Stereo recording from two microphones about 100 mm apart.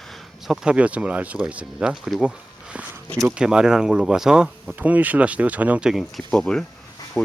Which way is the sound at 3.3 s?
5° right (ahead or behind).